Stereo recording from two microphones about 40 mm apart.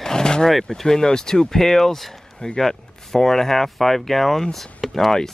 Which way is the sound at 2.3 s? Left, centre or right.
Centre.